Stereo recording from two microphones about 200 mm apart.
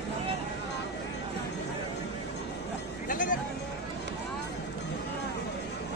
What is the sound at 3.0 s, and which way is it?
Music, 40° left (ahead or behind).